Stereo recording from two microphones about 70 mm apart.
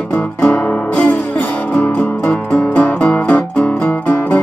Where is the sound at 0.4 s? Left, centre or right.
Centre.